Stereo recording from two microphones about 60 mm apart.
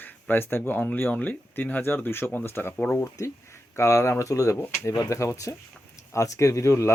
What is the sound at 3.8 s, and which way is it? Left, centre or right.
Speech, left.